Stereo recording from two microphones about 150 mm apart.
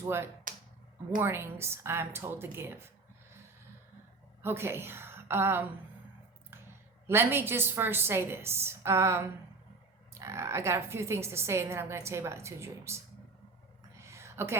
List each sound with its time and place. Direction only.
0.0 s a woman's voice: 15° right (ahead or behind)
0.5 s a sound: 60° right (ahead or behind)
1.2 s a woman's voice: 15° right (ahead or behind)
4.4 s a woman's voice: 15° right (ahead or behind)
7.1 s a woman's voice: 15° right (ahead or behind)
13.9 s a sound: 20° right (ahead or behind)